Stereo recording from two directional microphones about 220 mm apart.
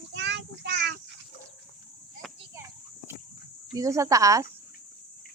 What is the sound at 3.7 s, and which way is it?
Speech, 15° right (ahead or behind).